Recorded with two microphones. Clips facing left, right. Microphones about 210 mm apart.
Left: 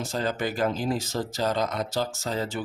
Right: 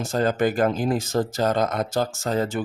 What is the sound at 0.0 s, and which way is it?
Speech, 50° right (ahead or behind).